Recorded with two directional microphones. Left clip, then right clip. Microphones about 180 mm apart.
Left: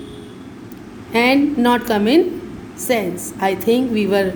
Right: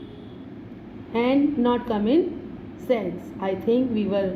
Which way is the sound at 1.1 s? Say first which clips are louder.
Left 7 dB; 70° left (ahead or behind).